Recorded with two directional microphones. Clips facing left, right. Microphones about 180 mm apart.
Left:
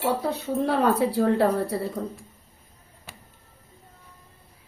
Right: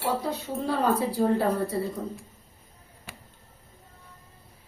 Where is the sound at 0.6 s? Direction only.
70° left (ahead or behind).